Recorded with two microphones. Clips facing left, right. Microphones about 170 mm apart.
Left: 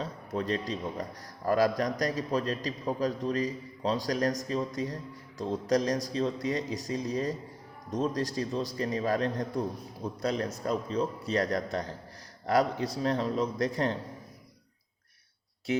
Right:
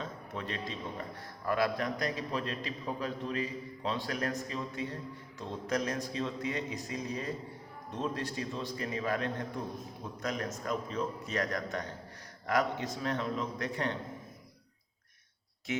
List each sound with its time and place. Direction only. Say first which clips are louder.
0.0 s a man's voice: left 6 dB; 40° left (ahead or behind)
15.7 s speech: left 6 dB; 35° left (ahead or behind)